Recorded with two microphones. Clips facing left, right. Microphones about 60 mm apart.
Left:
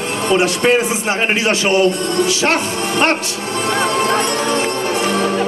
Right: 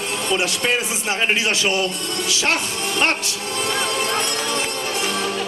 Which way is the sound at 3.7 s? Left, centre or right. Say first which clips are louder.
Left 8 dB; left.